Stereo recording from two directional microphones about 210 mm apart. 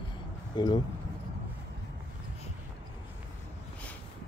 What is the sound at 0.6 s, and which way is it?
Speech, 20° left (ahead or behind).